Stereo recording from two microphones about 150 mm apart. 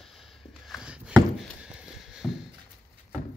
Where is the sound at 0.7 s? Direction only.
5° right (ahead or behind).